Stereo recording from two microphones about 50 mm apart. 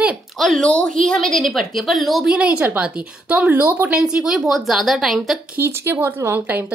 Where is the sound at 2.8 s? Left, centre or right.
Right.